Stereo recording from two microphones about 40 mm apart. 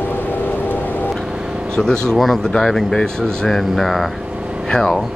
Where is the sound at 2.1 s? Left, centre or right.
Centre.